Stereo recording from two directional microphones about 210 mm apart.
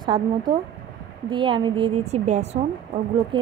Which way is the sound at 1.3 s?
25° right (ahead or behind).